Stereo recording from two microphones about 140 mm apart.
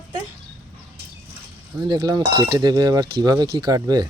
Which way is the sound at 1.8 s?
30° right (ahead or behind).